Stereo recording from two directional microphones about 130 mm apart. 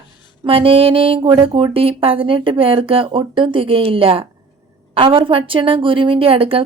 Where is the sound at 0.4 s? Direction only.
45° right (ahead or behind).